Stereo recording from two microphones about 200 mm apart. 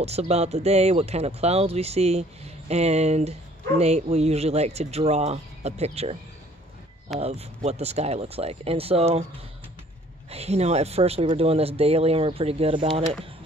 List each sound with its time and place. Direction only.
0.0 s speech: 30° right (ahead or behind)
7.2 s speech: 30° right (ahead or behind)
10.3 s speech: 30° right (ahead or behind)